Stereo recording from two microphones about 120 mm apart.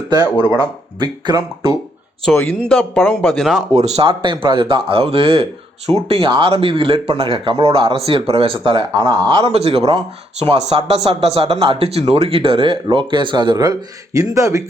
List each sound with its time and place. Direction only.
0.3 s speech: 35° left (ahead or behind)
0.9 s speech: 40° right (ahead or behind)
2.3 s speech: 15° left (ahead or behind)
3.8 s speech: 65° right (ahead or behind)
4.1 s speech: 45° right (ahead or behind)
9.5 s speech: 55° right (ahead or behind); by 14.6 s 25° right (ahead or behind)